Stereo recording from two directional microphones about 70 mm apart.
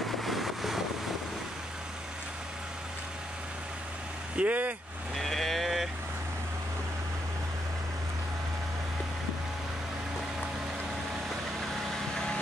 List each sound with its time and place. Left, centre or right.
0.2 s vehicle: centre
4.4 s speech: right
5.1 s livestock: centre